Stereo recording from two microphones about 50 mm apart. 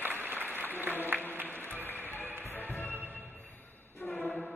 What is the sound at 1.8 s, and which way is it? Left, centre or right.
Music, left.